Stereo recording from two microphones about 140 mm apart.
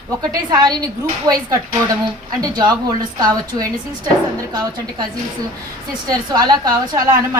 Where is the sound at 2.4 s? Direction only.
30° right (ahead or behind).